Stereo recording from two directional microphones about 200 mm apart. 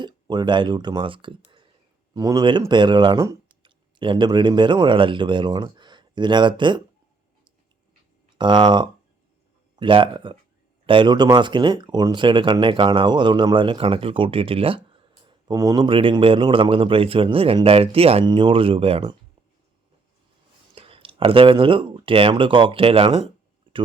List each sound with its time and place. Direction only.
0.0 s speech: 20° right (ahead or behind)
8.4 s speech: 25° right (ahead or behind)
20.7 s speech: 25° right (ahead or behind)
23.7 s a sound: 25° right (ahead or behind)